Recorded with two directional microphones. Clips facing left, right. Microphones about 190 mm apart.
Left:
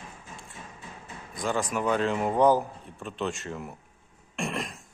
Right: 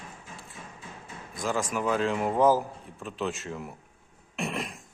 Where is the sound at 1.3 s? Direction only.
Centre (ahead or behind).